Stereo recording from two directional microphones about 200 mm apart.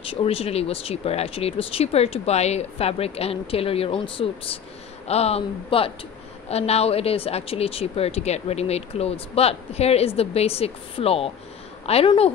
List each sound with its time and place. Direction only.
0.0 s speech: 30° left (ahead or behind)